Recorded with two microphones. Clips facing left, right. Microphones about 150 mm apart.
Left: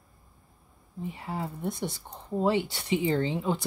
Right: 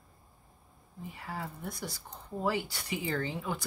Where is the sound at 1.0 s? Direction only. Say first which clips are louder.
Left 6 dB; 25° left (ahead or behind).